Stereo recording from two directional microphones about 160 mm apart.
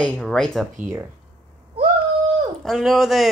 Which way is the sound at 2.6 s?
Centre (ahead or behind).